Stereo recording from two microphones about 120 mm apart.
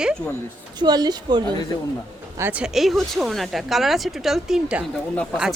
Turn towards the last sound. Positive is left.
turn(degrees=10)  # may be behind; listen again after turning